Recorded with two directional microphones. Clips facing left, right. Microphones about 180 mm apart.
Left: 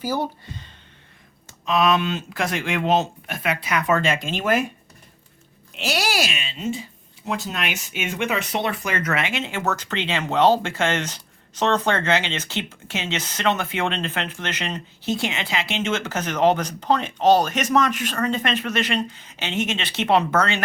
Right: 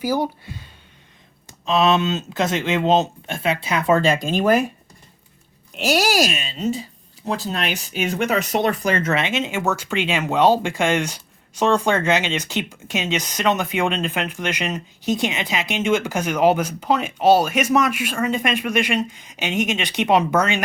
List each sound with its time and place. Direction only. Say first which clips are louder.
0.0 s speech: right 3 dB; 10° right (ahead or behind)
1.6 s speech: right 2 dB; 25° right (ahead or behind)
5.7 s a child's voice: right 5 dB; 45° right (ahead or behind); by 20.6 s 15° right (ahead or behind)